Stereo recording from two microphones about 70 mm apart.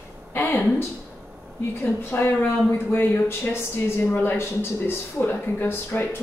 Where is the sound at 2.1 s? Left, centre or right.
Left.